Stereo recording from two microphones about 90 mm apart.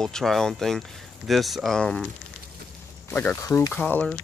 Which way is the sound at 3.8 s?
20° left (ahead or behind).